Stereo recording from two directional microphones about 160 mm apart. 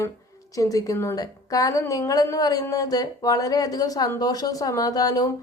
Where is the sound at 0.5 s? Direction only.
20° left (ahead or behind).